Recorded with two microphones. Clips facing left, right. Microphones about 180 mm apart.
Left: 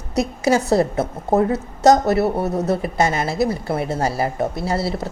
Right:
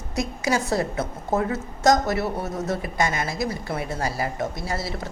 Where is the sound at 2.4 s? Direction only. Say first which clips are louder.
Left 7 dB; 65° left (ahead or behind).